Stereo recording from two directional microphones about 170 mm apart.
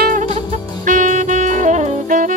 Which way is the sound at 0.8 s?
50° right (ahead or behind).